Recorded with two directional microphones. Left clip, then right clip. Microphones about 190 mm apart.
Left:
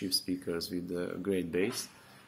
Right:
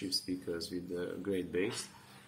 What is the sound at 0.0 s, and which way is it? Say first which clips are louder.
Speech: left 3 dB; 50° left (ahead or behind).